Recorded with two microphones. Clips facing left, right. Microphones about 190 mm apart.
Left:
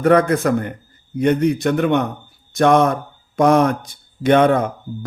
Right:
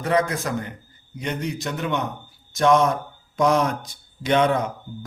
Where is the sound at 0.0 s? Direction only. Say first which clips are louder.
Left 8 dB; 55° left (ahead or behind).